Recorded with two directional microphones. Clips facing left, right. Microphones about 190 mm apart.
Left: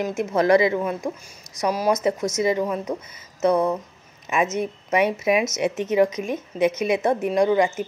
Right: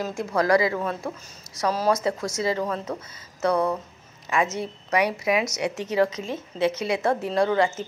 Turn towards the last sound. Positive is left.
turn(degrees=15)  # may be behind; listen again after turning